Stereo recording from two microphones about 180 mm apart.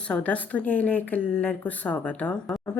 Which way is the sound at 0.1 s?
10° left (ahead or behind).